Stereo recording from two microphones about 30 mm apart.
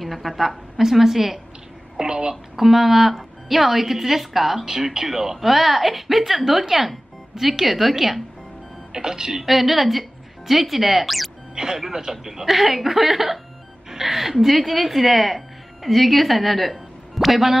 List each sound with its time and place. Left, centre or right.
0.0 s a woman's voice: centre
2.0 s speech: right
2.5 s a woman's voice: centre
8.9 s speech: right
9.5 s speech: centre
11.5 s a woman's voice: right; by 17.6 s centre